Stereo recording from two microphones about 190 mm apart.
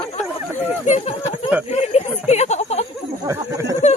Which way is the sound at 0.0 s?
30° left (ahead or behind).